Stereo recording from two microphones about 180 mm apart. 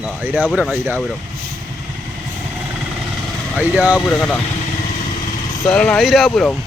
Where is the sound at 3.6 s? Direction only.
10° right (ahead or behind).